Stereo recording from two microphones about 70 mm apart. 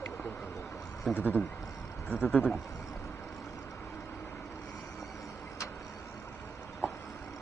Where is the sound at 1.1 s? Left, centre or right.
Left.